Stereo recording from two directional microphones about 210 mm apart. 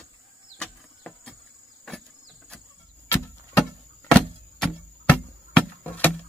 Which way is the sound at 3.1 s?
10° left (ahead or behind).